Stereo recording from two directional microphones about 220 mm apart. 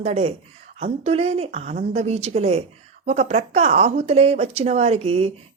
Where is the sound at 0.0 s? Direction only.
30° right (ahead or behind).